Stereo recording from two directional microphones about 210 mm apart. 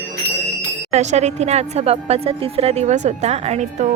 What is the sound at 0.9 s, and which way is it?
A woman's voice, 35° right (ahead or behind).